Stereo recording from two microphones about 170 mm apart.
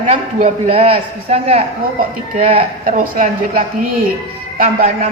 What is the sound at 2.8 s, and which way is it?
A woman's voice, 50° right (ahead or behind).